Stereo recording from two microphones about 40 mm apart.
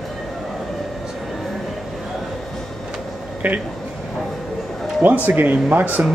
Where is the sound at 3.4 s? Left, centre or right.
Right.